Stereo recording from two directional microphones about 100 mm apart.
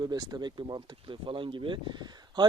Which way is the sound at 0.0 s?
40° right (ahead or behind).